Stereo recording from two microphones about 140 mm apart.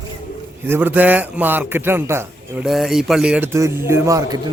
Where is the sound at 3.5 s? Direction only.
20° right (ahead or behind).